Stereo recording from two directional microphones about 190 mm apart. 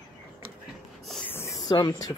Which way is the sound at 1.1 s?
5° left (ahead or behind).